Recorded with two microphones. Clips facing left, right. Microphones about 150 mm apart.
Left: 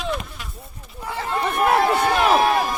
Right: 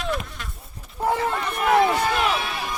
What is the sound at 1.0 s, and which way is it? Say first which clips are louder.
Chatter: right 7 dB; 40° right (ahead or behind).